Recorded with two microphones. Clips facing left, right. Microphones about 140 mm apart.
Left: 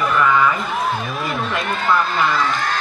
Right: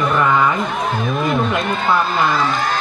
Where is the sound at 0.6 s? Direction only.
Centre (ahead or behind).